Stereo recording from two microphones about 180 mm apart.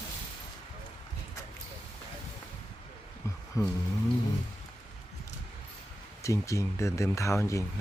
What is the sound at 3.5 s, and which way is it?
Speech, 20° left (ahead or behind).